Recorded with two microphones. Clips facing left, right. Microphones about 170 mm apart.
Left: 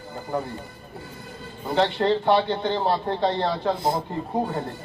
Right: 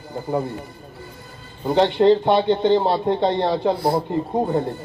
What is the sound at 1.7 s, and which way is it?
A man's voice, 20° right (ahead or behind).